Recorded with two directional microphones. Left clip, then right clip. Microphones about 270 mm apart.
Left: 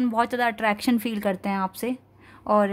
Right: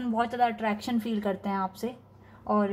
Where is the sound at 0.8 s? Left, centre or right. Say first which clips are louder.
Left 6 dB; left.